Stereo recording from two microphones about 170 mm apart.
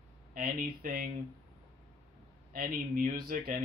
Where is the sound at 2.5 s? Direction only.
60° right (ahead or behind).